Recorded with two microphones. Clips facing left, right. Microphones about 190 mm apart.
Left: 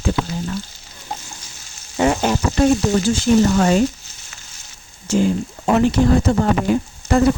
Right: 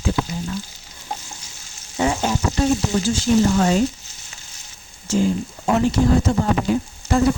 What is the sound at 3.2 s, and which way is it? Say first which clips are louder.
Speech: left 1 dB; 60° left (ahead or behind).